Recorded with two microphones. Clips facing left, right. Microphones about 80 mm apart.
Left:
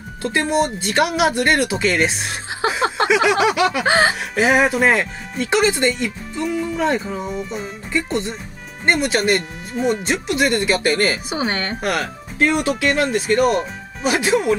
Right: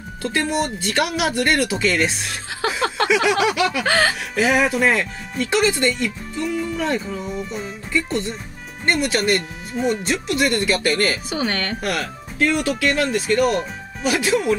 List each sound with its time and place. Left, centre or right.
0.2 s speech: left
6.5 s speech: centre
6.8 s speech: left